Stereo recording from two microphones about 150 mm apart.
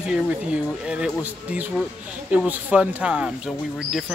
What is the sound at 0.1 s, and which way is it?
Speech, 5° right (ahead or behind).